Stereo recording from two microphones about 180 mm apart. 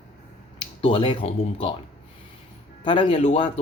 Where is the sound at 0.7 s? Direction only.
30° left (ahead or behind).